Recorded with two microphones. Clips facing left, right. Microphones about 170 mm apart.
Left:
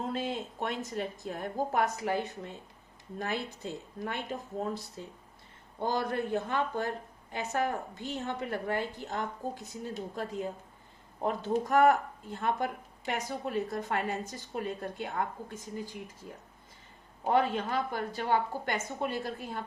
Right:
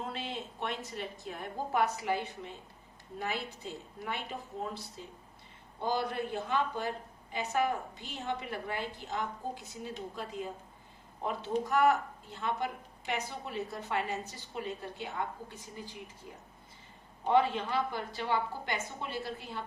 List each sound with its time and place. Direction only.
0.0 s speech: 45° left (ahead or behind)
5.8 s speech: 50° left (ahead or behind)
17.2 s speech: 45° left (ahead or behind)